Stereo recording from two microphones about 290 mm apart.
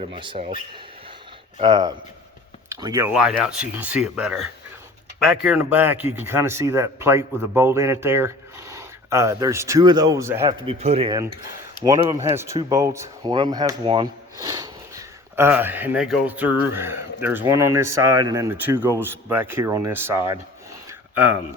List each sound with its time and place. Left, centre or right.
0.0 s speech: centre
10.8 s speech: right